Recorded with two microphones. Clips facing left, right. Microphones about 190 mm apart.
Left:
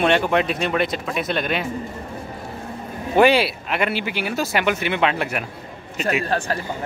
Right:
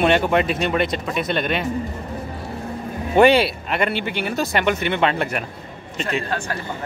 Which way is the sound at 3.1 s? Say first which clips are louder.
Right 2 dB; centre (ahead or behind).